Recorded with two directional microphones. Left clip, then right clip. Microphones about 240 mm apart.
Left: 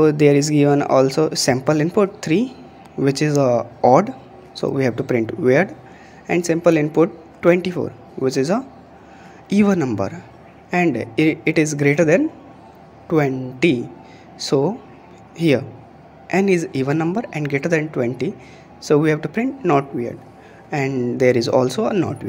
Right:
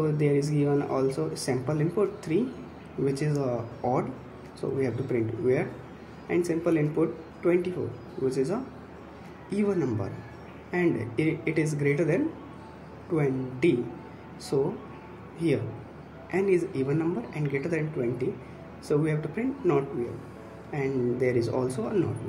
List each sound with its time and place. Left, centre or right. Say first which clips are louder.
0.0 s a man's voice: left 12 dB; left